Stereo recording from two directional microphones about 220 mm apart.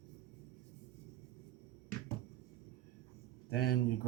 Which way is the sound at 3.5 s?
45° left (ahead or behind).